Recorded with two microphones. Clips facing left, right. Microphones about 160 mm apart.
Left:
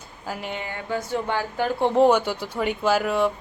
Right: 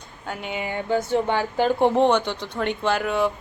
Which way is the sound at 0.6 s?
20° right (ahead or behind).